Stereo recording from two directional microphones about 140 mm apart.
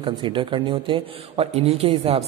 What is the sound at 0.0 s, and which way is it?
A man's voice, 35° right (ahead or behind).